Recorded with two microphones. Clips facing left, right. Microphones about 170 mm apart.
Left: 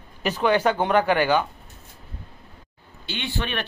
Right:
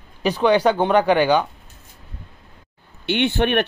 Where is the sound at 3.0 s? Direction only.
65° right (ahead or behind).